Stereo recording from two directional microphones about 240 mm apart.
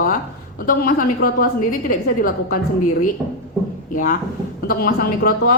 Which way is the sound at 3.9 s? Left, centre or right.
Left.